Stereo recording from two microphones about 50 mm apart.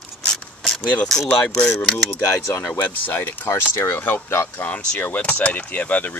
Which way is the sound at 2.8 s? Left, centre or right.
Left.